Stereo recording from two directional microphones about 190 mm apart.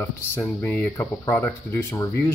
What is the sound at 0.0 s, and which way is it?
Speech, 10° left (ahead or behind).